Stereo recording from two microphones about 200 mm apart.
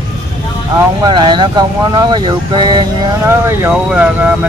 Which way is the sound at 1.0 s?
25° right (ahead or behind).